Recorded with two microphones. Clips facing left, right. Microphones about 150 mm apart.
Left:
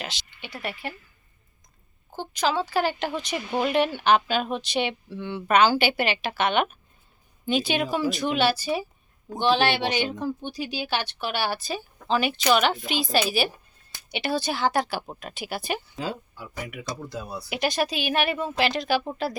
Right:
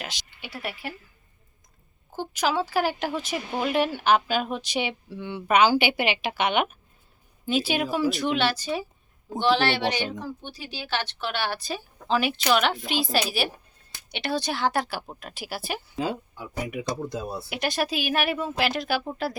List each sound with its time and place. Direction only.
0.0 s speech: 10° right (ahead or behind)
2.1 s a woman's voice: 10° right (ahead or behind)
16.6 s speech: 20° right (ahead or behind)
17.5 s a woman's voice: centre (ahead or behind)